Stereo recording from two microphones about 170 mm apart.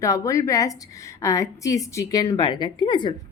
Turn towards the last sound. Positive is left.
turn(degrees=25)  # may be behind; listen again after turning